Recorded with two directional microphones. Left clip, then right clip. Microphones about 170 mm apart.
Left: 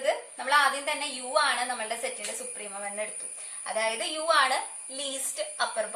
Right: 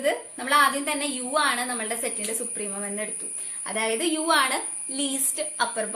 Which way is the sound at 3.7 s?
45° right (ahead or behind).